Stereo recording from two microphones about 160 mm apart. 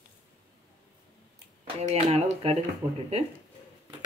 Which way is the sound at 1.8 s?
45° right (ahead or behind).